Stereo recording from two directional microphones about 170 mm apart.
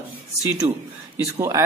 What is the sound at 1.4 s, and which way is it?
Speech, 20° right (ahead or behind).